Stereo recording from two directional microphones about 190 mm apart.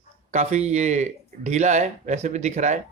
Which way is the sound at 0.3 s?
35° right (ahead or behind).